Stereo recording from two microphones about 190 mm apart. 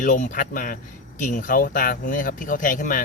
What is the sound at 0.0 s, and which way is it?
Speech, 40° left (ahead or behind).